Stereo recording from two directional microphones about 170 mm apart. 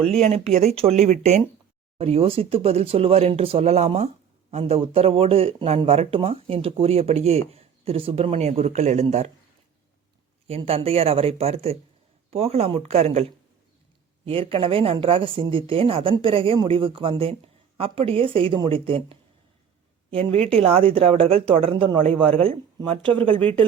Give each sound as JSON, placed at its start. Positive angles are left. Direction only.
{"t": 0.0, "sound": "speech", "side_deg": 5}
{"t": 0.3, "sound": "speech", "side_deg": -40}
{"t": 10.7, "sound": "speech", "side_deg": -35}
{"t": 14.3, "sound": "speech", "side_deg": -30}